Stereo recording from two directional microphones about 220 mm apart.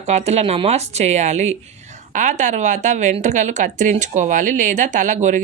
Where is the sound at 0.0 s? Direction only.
30° right (ahead or behind).